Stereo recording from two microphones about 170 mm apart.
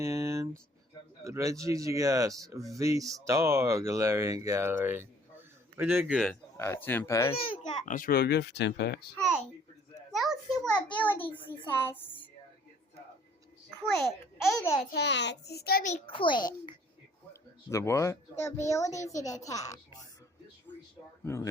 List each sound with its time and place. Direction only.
0.0 s a sound: 15° right (ahead or behind)
1.2 s speech: 15° right (ahead or behind)
6.6 s speech: 10° left (ahead or behind)
7.3 s a child's voice: 35° left (ahead or behind)
7.9 s speech: 55° left (ahead or behind); by 9.0 s 75° left (ahead or behind)
10.1 s a sound: centre (ahead or behind)
10.9 s speech: 10° left (ahead or behind)
13.9 s a child's voice: centre (ahead or behind)
14.9 s speech: 90° left; by 15.8 s 70° left (ahead or behind)
16.0 s a child's voice: 30° left (ahead or behind)